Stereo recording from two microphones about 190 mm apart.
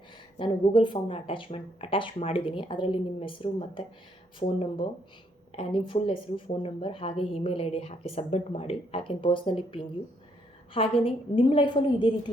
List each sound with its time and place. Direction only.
0.3 s speech: 25° left (ahead or behind)